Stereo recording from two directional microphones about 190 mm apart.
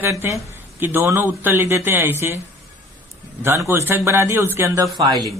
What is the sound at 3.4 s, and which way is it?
A man's voice, 15° right (ahead or behind).